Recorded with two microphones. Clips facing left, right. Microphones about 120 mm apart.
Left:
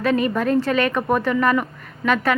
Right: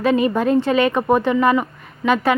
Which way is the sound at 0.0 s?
30° right (ahead or behind).